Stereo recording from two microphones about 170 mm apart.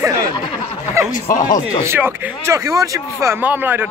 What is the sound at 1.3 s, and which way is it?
Speech, 50° left (ahead or behind).